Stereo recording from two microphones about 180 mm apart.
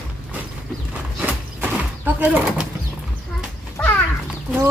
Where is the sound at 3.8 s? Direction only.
10° left (ahead or behind).